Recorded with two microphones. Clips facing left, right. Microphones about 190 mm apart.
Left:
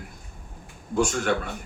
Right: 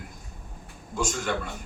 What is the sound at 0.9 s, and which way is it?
Speech, 60° left (ahead or behind).